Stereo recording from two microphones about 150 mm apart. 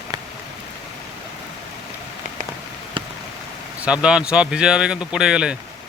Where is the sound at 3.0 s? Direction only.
35° right (ahead or behind).